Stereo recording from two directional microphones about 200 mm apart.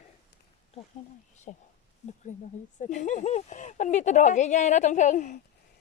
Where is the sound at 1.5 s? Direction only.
40° left (ahead or behind).